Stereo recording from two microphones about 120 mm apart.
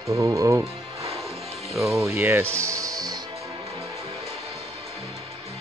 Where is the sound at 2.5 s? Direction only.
25° right (ahead or behind).